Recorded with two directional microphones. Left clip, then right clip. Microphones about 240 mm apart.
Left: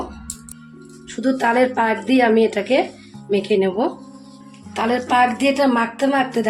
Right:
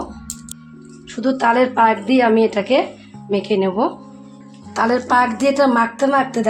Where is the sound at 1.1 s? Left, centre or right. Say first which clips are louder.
Right 2 dB; centre.